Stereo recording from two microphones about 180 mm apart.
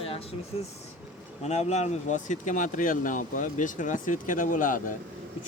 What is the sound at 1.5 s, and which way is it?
Speech, 40° left (ahead or behind).